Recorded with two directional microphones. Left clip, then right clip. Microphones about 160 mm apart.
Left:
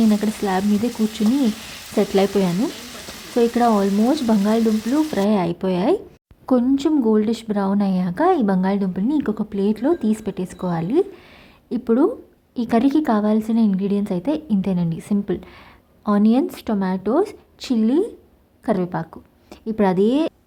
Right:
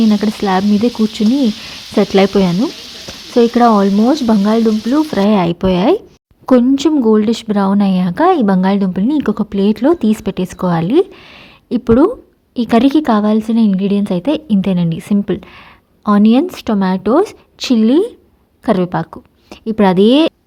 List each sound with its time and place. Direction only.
0.1 s a woman's voice: 30° right (ahead or behind)
2.0 s a woman's voice: 30° right (ahead or behind)